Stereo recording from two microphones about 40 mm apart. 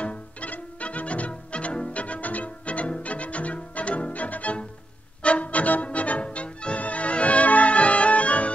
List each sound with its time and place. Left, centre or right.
0.0 s music: left